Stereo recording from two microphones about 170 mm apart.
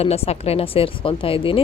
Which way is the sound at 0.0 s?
35° left (ahead or behind).